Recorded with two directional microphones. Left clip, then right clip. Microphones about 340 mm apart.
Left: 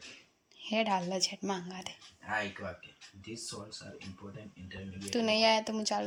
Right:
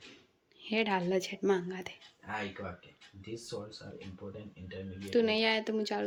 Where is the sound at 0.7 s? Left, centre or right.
Centre.